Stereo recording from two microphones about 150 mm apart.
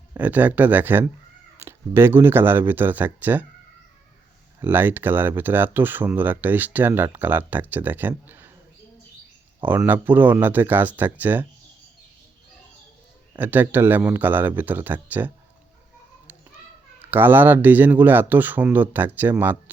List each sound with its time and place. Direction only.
0.1 s speech: 10° right (ahead or behind)
4.6 s speech: 15° right (ahead or behind)
9.6 s speech: 15° right (ahead or behind)
13.4 s speech: 10° right (ahead or behind)
17.0 s speech: 15° right (ahead or behind)